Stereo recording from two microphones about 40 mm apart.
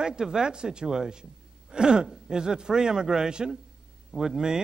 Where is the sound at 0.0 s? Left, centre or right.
Centre.